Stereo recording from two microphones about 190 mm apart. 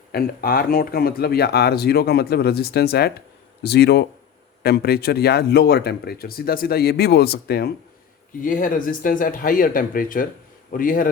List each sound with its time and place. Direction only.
0.1 s speech: 50° left (ahead or behind)
8.4 s speech: 45° left (ahead or behind)